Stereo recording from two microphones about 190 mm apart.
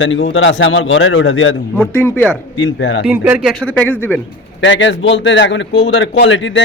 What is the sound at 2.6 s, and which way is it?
Speech, 80° left.